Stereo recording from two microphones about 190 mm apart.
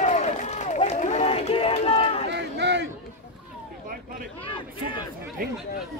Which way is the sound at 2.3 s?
65° right (ahead or behind).